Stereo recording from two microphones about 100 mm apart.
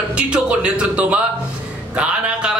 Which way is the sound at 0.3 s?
10° right (ahead or behind).